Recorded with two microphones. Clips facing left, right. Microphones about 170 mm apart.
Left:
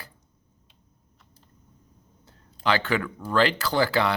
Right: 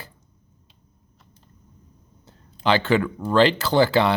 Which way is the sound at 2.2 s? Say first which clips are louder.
Right 4 dB; 25° right (ahead or behind).